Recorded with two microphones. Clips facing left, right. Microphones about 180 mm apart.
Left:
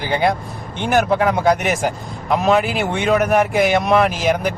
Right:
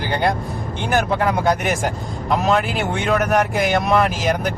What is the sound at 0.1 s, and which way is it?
A man's voice, 5° left (ahead or behind).